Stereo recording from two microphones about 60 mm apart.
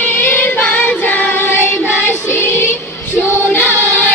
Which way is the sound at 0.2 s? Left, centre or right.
Left.